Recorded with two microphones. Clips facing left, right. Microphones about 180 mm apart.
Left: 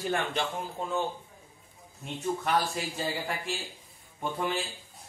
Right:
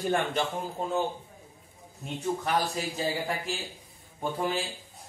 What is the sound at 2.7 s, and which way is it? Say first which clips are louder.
Speech: right 2 dB; 40° right (ahead or behind).